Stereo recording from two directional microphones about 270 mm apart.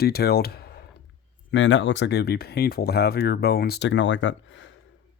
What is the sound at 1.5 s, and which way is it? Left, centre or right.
Speech, left.